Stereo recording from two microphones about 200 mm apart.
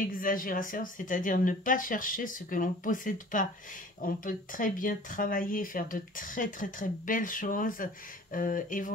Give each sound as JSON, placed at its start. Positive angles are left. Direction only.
{"t": 0.2, "sound": "speech", "side_deg": 45}